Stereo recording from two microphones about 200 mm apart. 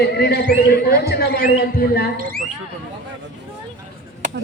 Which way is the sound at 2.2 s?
45° right (ahead or behind).